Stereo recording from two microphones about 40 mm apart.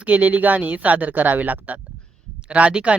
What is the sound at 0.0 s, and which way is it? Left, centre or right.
Speech, right.